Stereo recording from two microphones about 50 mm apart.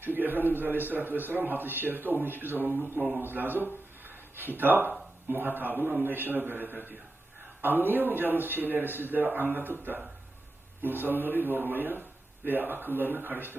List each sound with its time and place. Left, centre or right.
0.0 s a man's voice: right